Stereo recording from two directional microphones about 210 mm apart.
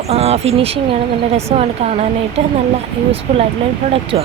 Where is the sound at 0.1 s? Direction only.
30° right (ahead or behind).